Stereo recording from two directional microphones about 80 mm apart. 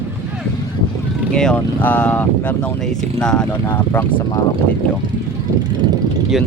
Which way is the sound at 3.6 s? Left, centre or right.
Left.